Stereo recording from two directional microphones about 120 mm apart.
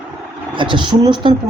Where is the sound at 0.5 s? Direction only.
40° right (ahead or behind).